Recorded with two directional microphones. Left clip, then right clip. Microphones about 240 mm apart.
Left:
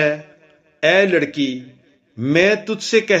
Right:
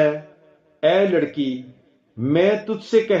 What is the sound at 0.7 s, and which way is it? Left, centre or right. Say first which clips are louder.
A man's voice: left 3 dB; left.